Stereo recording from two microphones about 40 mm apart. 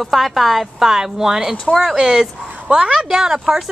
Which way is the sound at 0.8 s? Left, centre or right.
Centre.